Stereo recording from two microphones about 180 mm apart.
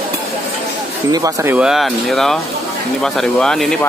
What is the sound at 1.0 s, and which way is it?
Speech, 20° right (ahead or behind).